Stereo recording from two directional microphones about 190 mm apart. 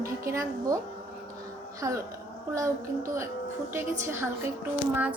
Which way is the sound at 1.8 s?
15° right (ahead or behind).